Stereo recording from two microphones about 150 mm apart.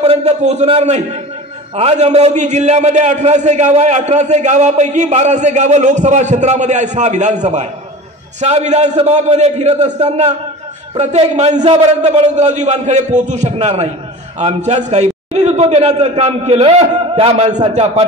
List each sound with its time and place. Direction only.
0.0 s a man's voice: 45° right (ahead or behind)